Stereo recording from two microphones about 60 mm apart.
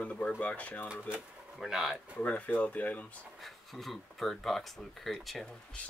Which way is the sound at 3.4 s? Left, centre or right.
Centre.